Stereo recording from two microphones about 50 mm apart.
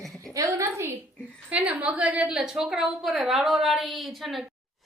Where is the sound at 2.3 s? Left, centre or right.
Centre.